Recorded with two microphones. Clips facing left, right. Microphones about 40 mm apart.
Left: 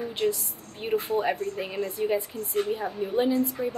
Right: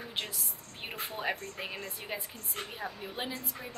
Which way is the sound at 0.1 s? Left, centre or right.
Centre.